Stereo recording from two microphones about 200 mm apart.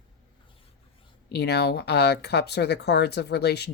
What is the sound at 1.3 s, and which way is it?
Speech, 55° left (ahead or behind).